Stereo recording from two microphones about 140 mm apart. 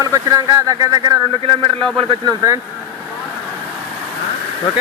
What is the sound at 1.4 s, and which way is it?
Speech, 40° right (ahead or behind).